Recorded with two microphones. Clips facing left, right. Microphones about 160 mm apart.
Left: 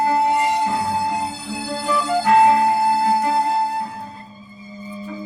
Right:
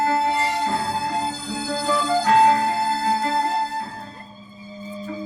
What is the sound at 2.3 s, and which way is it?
Music, 15° left (ahead or behind).